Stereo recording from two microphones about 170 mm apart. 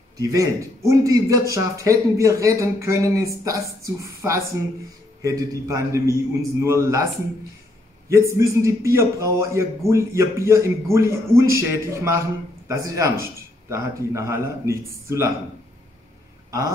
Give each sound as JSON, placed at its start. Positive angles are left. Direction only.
{"t": 0.2, "sound": "a man's voice", "side_deg": -20}
{"t": 8.1, "sound": "a man's voice", "side_deg": -15}
{"t": 16.4, "sound": "a sound", "side_deg": -20}